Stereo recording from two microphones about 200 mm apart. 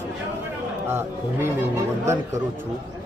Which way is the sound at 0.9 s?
10° right (ahead or behind).